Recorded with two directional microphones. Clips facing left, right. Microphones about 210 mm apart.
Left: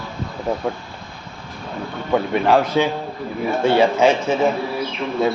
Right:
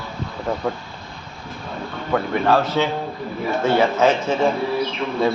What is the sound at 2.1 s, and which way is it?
A man's voice, 15° left (ahead or behind).